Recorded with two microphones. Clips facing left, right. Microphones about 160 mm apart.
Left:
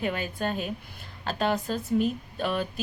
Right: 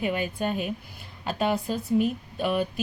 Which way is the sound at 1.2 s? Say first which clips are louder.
Right 1 dB; 10° right (ahead or behind).